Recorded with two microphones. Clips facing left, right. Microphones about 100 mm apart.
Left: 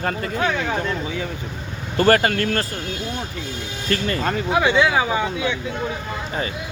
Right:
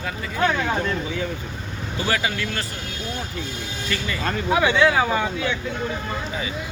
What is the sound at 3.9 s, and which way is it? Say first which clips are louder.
Speech: left 6 dB; 45° left (ahead or behind).